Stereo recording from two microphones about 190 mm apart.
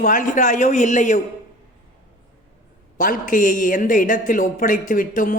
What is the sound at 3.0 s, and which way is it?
A man's voice, 45° left (ahead or behind).